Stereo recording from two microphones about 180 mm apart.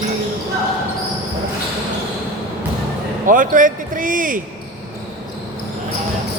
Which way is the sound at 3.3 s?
50° right (ahead or behind).